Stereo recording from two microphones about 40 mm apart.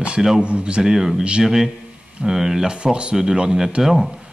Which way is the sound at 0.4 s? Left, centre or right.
Right.